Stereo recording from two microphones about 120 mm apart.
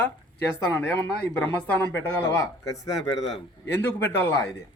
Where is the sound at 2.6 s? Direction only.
30° left (ahead or behind).